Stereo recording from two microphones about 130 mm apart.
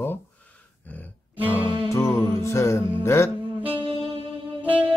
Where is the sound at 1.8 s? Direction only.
25° left (ahead or behind).